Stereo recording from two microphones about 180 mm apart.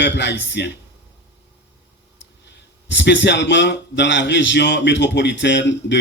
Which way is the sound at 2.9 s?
75° left (ahead or behind).